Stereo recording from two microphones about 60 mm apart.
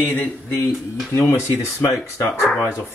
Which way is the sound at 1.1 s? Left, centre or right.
Left.